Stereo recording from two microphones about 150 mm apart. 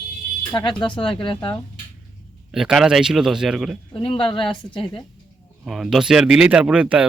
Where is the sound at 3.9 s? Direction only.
35° left (ahead or behind).